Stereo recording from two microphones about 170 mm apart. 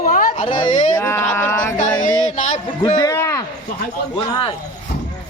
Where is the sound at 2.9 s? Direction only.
20° left (ahead or behind).